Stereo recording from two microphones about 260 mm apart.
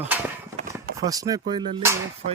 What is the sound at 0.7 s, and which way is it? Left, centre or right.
Speech, centre.